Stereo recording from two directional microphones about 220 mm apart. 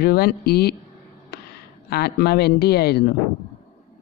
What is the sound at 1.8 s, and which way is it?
Speech, 45° left (ahead or behind).